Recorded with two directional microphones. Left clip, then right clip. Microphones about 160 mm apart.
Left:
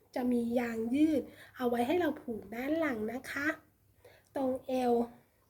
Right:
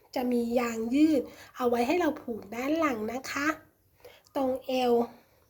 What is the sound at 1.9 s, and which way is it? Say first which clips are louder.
Speech: right 4 dB; 30° left (ahead or behind).